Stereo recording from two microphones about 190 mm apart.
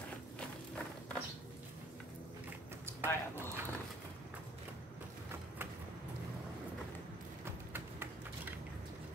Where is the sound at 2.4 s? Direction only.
10° right (ahead or behind).